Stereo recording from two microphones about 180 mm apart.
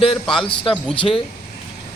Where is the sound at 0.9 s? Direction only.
30° left (ahead or behind).